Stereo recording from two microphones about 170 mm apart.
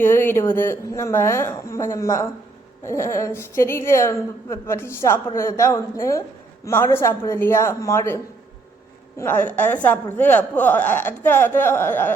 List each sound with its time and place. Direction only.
0.0 s a woman's voice: 10° left (ahead or behind)